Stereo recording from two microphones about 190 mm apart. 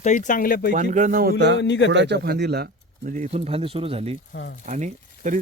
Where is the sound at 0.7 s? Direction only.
40° right (ahead or behind); by 1.6 s 60° right (ahead or behind).